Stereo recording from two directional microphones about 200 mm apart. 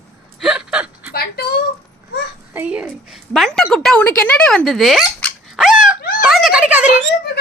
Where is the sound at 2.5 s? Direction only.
10° right (ahead or behind).